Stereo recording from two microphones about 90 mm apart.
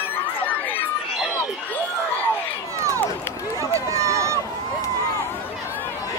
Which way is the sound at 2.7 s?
35° right (ahead or behind).